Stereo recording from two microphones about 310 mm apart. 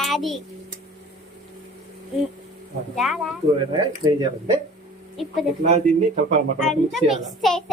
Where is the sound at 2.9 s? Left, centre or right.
Centre.